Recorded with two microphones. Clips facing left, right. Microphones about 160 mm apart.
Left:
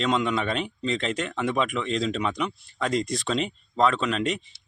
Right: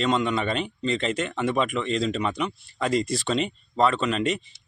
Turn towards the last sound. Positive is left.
turn(degrees=0)  # may be behind; listen again after turning